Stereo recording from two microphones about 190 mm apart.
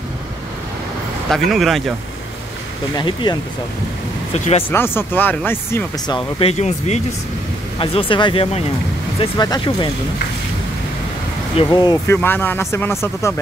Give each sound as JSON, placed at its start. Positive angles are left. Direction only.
{"t": 1.3, "sound": "speech", "side_deg": 0}
{"t": 3.0, "sound": "speech", "side_deg": 25}
{"t": 4.6, "sound": "speech", "side_deg": 10}
{"t": 6.4, "sound": "speech", "side_deg": 35}
{"t": 11.5, "sound": "speech", "side_deg": 20}
{"t": 12.2, "sound": "speech", "side_deg": 10}